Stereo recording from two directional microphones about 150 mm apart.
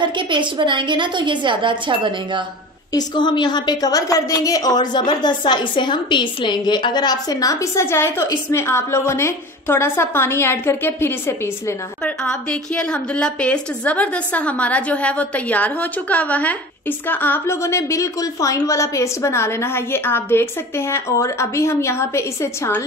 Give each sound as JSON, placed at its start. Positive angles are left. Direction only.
{"t": 0.0, "sound": "a woman's voice", "side_deg": -30}
{"t": 2.9, "sound": "a woman's voice", "side_deg": 30}
{"t": 12.0, "sound": "a woman's voice", "side_deg": 5}